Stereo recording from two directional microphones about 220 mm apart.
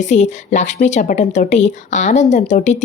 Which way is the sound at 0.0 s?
30° left (ahead or behind).